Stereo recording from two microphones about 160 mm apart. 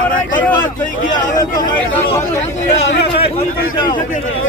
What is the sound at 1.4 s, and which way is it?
Speech, 25° left (ahead or behind).